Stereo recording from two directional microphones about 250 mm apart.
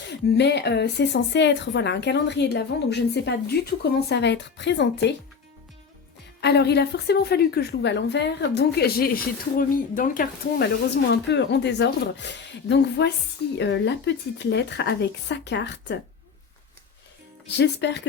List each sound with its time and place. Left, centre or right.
0.1 s a woman's voice: left
6.4 s a woman's voice: left
17.6 s a woman's voice: left